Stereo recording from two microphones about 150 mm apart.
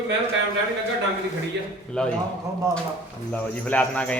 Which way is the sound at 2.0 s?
5° left (ahead or behind).